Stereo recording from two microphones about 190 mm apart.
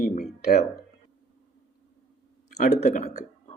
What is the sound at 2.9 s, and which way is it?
Speech, 50° left (ahead or behind).